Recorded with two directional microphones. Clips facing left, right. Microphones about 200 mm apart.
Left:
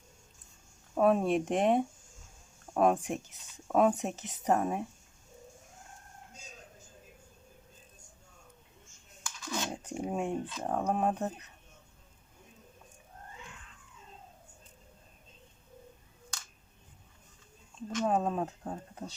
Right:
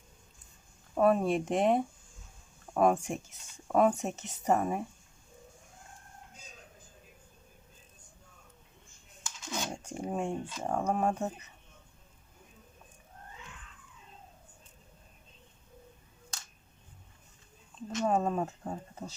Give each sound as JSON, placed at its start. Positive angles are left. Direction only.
{"t": 0.9, "sound": "speech", "side_deg": 0}
{"t": 9.2, "sound": "a sound", "side_deg": -20}
{"t": 9.6, "sound": "speech", "side_deg": 5}
{"t": 18.0, "sound": "speech", "side_deg": 0}